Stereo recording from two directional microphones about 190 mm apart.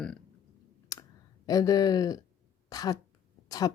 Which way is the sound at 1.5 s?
20° left (ahead or behind).